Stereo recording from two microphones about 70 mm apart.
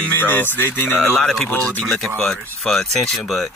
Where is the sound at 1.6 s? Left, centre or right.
Centre.